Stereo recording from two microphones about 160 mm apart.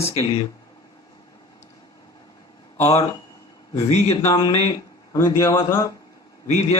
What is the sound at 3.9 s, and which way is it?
Speech, 45° left (ahead or behind).